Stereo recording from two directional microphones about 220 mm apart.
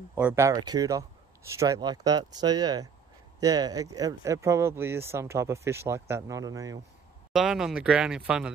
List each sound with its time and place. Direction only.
0.1 s speech: 10° right (ahead or behind)
7.3 s speech: centre (ahead or behind)